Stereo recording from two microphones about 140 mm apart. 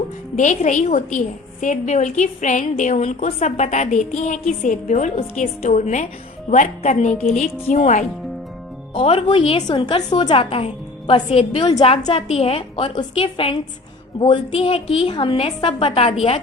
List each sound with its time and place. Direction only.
0.3 s a woman's voice: 60° left (ahead or behind)
9.0 s a woman's voice: 40° left (ahead or behind)